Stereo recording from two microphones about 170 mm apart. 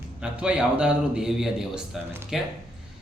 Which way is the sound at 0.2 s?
5° right (ahead or behind).